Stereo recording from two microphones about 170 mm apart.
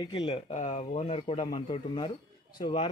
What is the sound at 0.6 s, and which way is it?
Speech, 40° left (ahead or behind).